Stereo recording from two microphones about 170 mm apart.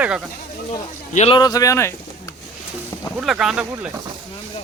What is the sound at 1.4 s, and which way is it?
Speech, 20° left (ahead or behind).